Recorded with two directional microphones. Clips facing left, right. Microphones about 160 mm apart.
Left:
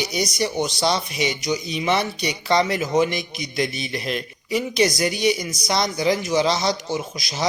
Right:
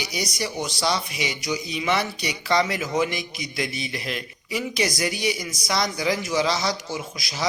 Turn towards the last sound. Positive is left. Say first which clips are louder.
# left 4 dB
turn(degrees=20)  # may be behind; listen again after turning